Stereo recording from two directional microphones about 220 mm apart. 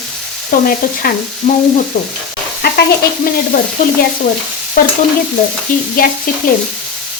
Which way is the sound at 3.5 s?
40° left (ahead or behind).